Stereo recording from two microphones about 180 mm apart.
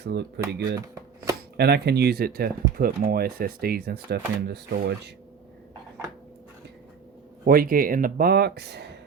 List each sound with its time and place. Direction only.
0.0 s speech: 65° right (ahead or behind)
1.5 s speech: 65° right (ahead or behind)
7.4 s speech: 55° right (ahead or behind)